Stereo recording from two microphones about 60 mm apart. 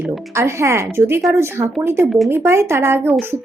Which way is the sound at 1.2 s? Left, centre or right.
Right.